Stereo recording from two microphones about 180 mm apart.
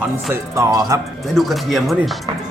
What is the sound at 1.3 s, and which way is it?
Speech, centre (ahead or behind).